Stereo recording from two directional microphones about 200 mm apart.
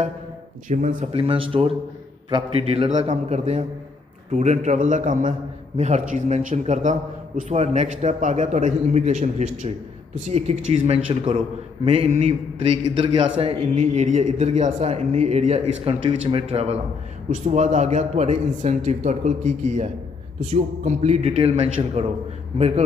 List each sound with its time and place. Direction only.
0.7 s a man's voice: 40° right (ahead or behind)
1.1 s a man's voice: 25° right (ahead or behind)